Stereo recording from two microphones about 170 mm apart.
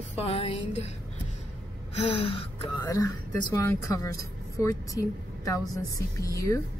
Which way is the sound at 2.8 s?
20° left (ahead or behind).